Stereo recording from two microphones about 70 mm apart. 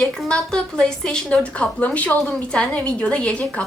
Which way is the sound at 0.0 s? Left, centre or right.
Centre.